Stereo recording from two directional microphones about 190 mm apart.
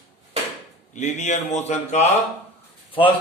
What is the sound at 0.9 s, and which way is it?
Speech, 40° left (ahead or behind).